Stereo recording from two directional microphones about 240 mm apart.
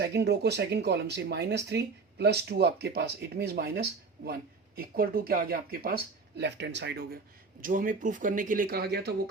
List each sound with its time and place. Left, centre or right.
0.0 s speech: right